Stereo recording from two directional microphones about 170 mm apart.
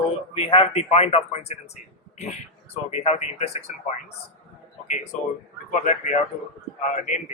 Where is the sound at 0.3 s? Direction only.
30° left (ahead or behind).